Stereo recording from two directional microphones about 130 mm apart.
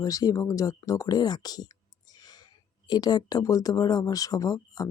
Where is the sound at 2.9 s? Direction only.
30° left (ahead or behind).